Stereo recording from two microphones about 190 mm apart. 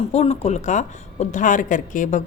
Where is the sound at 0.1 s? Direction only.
35° left (ahead or behind).